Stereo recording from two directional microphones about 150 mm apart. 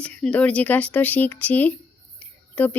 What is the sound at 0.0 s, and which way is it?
Speech, 5° left (ahead or behind).